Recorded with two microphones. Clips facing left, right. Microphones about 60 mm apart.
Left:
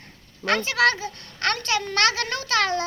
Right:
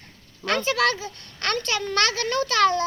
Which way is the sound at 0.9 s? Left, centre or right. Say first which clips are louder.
Left 1 dB; left.